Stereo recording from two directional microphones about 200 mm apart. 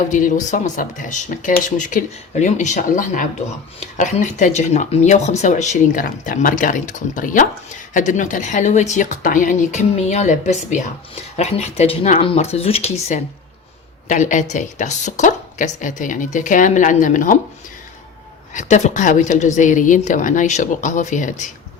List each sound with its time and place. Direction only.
0.0 s speech: 40° left (ahead or behind)
18.5 s speech: 35° left (ahead or behind)